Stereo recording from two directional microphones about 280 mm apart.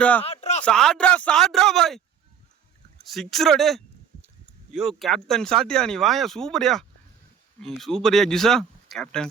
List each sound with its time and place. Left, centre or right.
0.0 s speech: centre
0.3 s a sound: left
0.6 s speech: centre
3.1 s speech: centre